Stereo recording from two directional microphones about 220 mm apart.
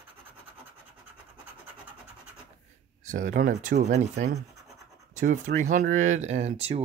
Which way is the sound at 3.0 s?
35° right (ahead or behind).